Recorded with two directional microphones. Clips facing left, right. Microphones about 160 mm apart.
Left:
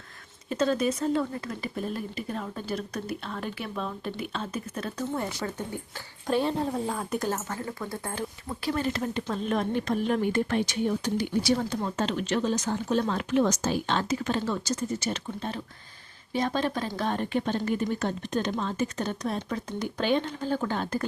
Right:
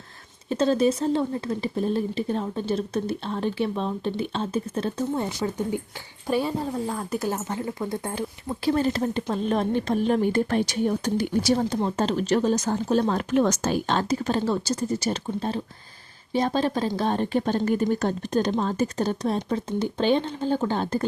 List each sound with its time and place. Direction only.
0.5 s speech: 30° right (ahead or behind)
6.2 s speech: 5° right (ahead or behind)
7.3 s speech: 15° right (ahead or behind)
8.7 s speech: 35° right (ahead or behind); by 13.7 s 55° right (ahead or behind)
13.8 s speech: 40° right (ahead or behind)